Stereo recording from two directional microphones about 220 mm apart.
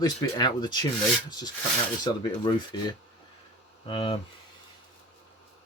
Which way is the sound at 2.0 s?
20° left (ahead or behind).